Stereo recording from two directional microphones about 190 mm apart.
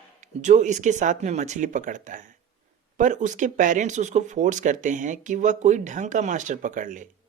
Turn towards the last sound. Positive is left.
turn(degrees=-40)  # may be behind; listen again after turning